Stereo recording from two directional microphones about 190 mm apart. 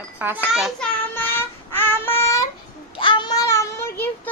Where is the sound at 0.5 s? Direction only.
Centre (ahead or behind).